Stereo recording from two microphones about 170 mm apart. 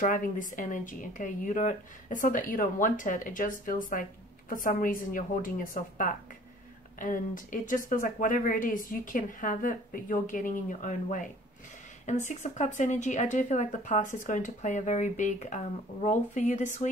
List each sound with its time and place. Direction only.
0.0 s speech: 50° left (ahead or behind)